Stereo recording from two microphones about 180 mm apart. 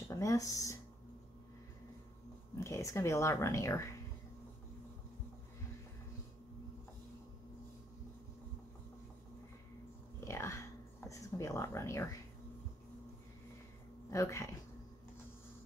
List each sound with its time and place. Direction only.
0.1 s speech: 20° left (ahead or behind)
2.5 s speech: 15° left (ahead or behind)
10.2 s a sound: 15° left (ahead or behind)
14.1 s speech: 15° left (ahead or behind)